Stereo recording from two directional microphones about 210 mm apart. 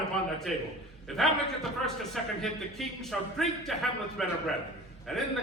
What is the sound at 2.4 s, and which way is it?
A man's voice, centre (ahead or behind).